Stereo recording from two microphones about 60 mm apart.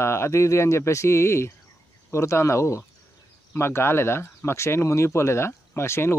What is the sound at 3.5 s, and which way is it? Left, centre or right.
Speech, left.